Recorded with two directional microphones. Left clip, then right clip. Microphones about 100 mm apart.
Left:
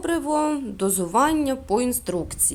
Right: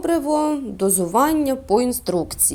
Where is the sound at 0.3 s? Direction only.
25° left (ahead or behind).